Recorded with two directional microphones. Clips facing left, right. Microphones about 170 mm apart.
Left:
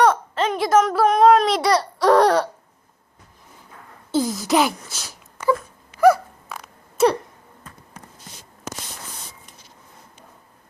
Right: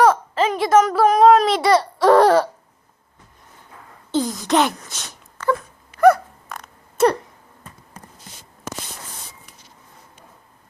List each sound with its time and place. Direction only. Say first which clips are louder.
0.0 s babbling: right 2 dB; centre (ahead or behind)
4.1 s speech: even; 5° left (ahead or behind)
5.4 s wail: left 1 dB; 10° left (ahead or behind)
6.0 s a sound: right 1 dB; centre (ahead or behind)